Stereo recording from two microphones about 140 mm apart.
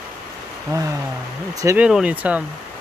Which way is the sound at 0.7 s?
25° right (ahead or behind).